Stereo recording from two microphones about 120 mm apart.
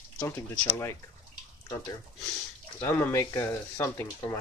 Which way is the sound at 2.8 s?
20° left (ahead or behind).